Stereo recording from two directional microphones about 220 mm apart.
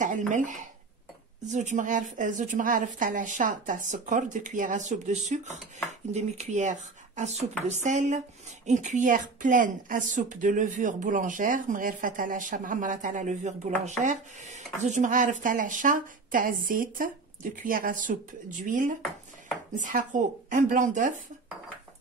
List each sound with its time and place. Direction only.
0.3 s a woman's voice: 35° right (ahead or behind)